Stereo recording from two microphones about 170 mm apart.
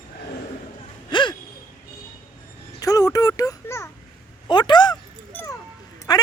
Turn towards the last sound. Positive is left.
turn(degrees=25)  # may be behind; listen again after turning